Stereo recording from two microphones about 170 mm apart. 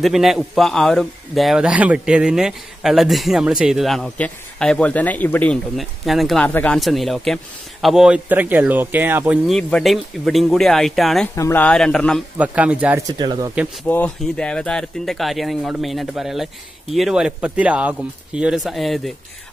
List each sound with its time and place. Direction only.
0.0 s a man's voice: centre (ahead or behind)
9.5 s a man's voice: 5° left (ahead or behind)
11.3 s a man's voice: 15° left (ahead or behind)
12.4 s speech: 10° right (ahead or behind)
13.0 s speech: 20° right (ahead or behind)
13.8 s a man's voice: 10° left (ahead or behind)